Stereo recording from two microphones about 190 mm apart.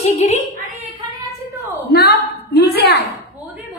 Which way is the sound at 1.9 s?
60° left (ahead or behind).